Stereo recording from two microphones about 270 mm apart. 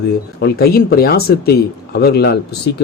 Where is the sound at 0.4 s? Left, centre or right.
Left.